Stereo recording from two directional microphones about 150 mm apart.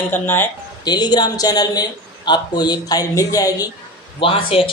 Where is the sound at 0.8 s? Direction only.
30° left (ahead or behind).